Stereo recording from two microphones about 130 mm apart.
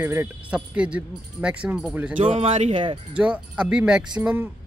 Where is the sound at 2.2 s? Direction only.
60° right (ahead or behind).